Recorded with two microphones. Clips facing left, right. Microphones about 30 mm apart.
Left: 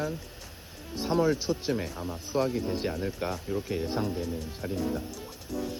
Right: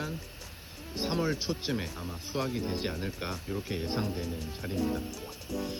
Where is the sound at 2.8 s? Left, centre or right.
Centre.